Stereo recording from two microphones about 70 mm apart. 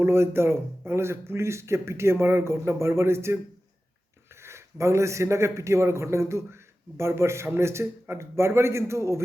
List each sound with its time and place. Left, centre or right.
0.0 s a man's voice: right
4.4 s a man's voice: right